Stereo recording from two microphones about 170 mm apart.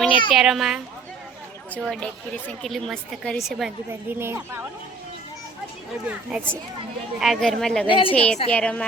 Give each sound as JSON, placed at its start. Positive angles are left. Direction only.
{"t": 0.3, "sound": "a woman's voice", "side_deg": -5}
{"t": 4.1, "sound": "a woman's voice", "side_deg": -15}
{"t": 6.1, "sound": "a woman's voice", "side_deg": -10}
{"t": 7.9, "sound": "a woman's voice", "side_deg": 30}
{"t": 8.1, "sound": "music", "side_deg": 10}